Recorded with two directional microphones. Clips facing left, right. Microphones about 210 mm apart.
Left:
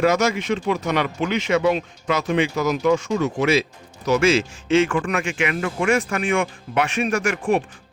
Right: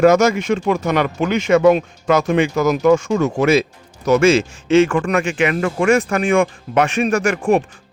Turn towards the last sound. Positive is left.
turn(degrees=-45)  # may be behind; listen again after turning